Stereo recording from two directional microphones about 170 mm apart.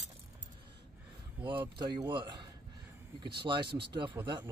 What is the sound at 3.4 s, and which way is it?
Speech, 30° right (ahead or behind).